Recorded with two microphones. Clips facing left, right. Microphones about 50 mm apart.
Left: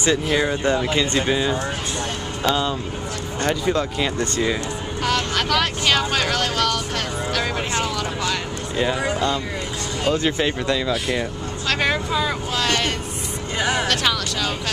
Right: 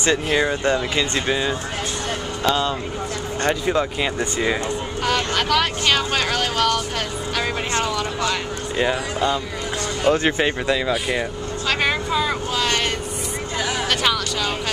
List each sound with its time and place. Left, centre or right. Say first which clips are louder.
0.1 s speech: right 1 dB; centre
3.4 s speech: right 1 dB; centre
5.0 s speech: even; centre
7.3 s vehicle: right 2 dB; centre
10.0 s speech: right 2 dB; right
11.8 s vehicle: even; centre
13.6 s a sound: left 3 dB; left
13.8 s music: right 1 dB; centre